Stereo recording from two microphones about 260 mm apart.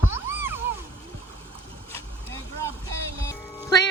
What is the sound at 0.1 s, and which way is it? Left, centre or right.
Cat, centre.